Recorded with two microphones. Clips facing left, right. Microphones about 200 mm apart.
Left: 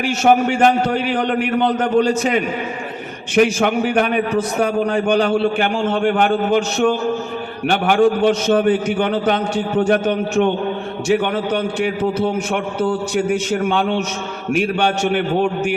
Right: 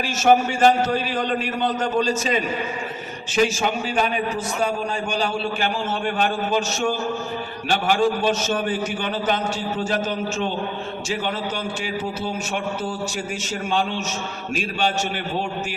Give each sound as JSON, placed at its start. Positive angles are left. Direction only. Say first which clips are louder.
{"t": 0.0, "sound": "a man's voice", "louder": "left 3 dB", "side_deg": 60}